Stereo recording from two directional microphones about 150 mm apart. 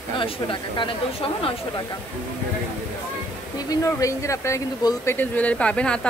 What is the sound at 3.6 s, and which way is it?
Speech, 20° left (ahead or behind).